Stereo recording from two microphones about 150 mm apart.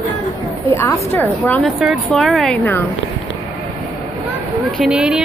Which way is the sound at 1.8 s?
Centre (ahead or behind).